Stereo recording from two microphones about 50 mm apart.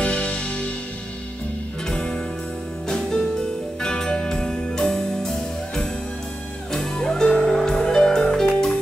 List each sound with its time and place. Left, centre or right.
0.0 s music: left
1.9 s music: centre
6.7 s music: centre